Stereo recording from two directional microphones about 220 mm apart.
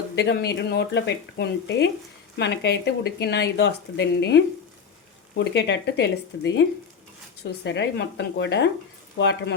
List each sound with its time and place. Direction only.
0.2 s speech: 50° left (ahead or behind)